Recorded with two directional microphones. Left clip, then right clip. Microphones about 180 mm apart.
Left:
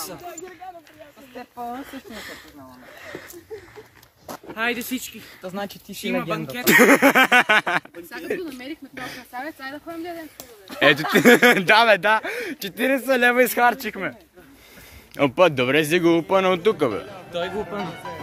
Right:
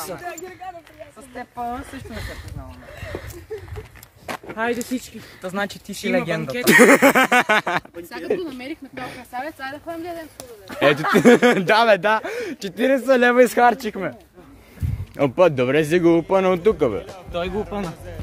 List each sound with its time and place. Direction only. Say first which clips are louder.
1.3 s speech: right 4 dB; 10° right (ahead or behind)
4.6 s speech: right 1 dB; 20° left (ahead or behind)
5.4 s a man's voice: right 5 dB; 5° right (ahead or behind)
8.3 s speech: right 4 dB; 25° right (ahead or behind)
8.9 s speech: right 1 dB; 15° right (ahead or behind)
9.3 s speech: right 5 dB; 30° right (ahead or behind)
10.8 s a man's voice: even; centre (ahead or behind)
15.1 s a man's voice: right 1 dB; centre (ahead or behind)
17.3 s speech: right 1 dB; 60° right (ahead or behind)